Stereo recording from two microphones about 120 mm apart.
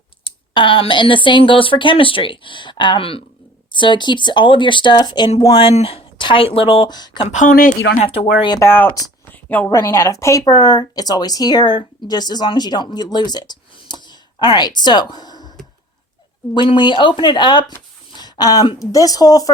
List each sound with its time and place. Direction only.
0.3 s speech: 45° left (ahead or behind)
5.5 s speech: 55° left (ahead or behind)
6.9 s speech: 40° left (ahead or behind)
8.0 s speech: 55° left (ahead or behind)
8.6 s speech: 15° left (ahead or behind)
9.3 s a sound: 15° left (ahead or behind)
9.6 s speech: 25° left (ahead or behind)
16.6 s speech: 40° left (ahead or behind)
18.1 s a sound: 35° left (ahead or behind)
18.9 s speech: 30° left (ahead or behind)